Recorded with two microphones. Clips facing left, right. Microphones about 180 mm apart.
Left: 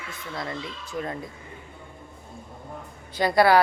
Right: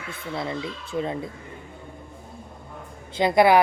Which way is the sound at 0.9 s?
25° right (ahead or behind).